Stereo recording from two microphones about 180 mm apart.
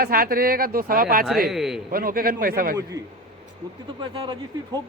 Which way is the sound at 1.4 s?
Centre (ahead or behind).